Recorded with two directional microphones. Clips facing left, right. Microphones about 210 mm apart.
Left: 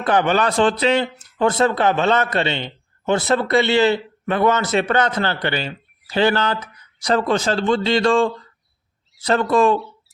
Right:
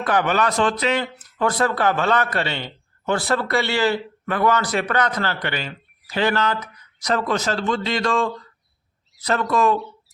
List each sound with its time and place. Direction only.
0.0 s speech: 25° left (ahead or behind)